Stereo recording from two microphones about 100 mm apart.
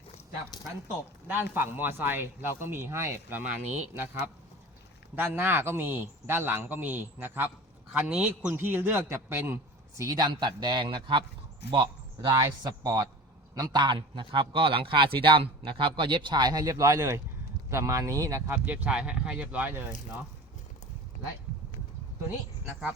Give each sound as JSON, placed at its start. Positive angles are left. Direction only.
{"t": 1.3, "sound": "a man's voice", "side_deg": -20}
{"t": 9.9, "sound": "a man's voice", "side_deg": -35}
{"t": 12.4, "sound": "speech", "side_deg": -40}
{"t": 13.6, "sound": "a man's voice", "side_deg": -50}
{"t": 18.5, "sound": "speech", "side_deg": -15}